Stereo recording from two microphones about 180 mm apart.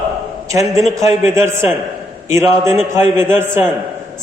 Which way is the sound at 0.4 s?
15° right (ahead or behind).